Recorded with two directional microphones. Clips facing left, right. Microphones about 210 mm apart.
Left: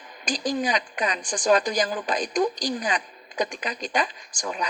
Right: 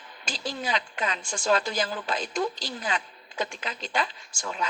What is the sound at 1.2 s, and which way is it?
A woman's voice, 15° left (ahead or behind).